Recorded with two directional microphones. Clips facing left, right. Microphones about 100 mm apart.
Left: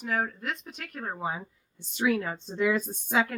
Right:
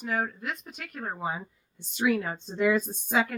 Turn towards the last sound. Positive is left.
turn(degrees=0)  # may be behind; listen again after turning